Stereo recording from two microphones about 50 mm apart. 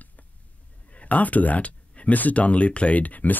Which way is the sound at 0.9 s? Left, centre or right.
Left.